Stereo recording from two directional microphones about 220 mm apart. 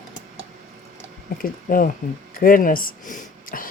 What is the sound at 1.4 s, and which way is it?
Cutlery, 40° left (ahead or behind).